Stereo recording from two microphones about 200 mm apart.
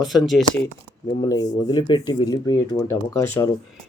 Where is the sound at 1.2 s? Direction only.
20° left (ahead or behind).